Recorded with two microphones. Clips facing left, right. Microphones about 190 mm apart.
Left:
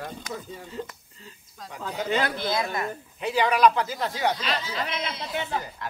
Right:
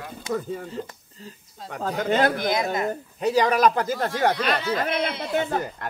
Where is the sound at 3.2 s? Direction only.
40° right (ahead or behind).